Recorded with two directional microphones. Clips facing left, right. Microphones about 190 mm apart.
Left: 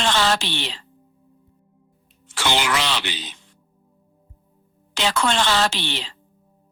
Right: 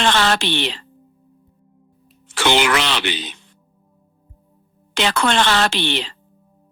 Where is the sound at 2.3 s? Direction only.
65° right (ahead or behind).